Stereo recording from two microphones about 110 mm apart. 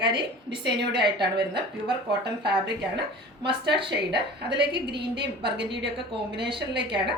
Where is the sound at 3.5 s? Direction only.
50° right (ahead or behind).